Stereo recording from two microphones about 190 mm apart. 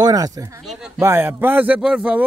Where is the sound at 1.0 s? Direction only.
15° right (ahead or behind).